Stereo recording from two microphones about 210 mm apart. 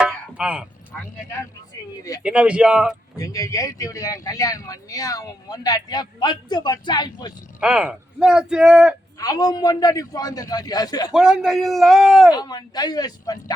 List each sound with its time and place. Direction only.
0.0 s a sound: 5° right (ahead or behind)
2.2 s speech: 5° right (ahead or behind)
3.2 s speech: 15° left (ahead or behind)
7.6 s speech: 5° right (ahead or behind)
9.1 s speech: 20° left (ahead or behind)
11.1 s speech: centre (ahead or behind)
12.3 s speech: 20° left (ahead or behind)